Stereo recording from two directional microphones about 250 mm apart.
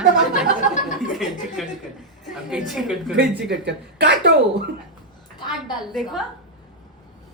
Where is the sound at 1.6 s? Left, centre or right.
Centre.